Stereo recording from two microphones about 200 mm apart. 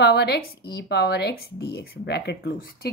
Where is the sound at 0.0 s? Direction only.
55° left (ahead or behind).